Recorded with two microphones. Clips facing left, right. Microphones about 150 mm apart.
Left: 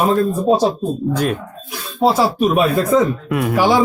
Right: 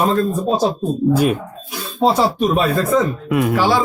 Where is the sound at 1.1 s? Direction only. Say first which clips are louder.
Right 3 dB; 5° right (ahead or behind).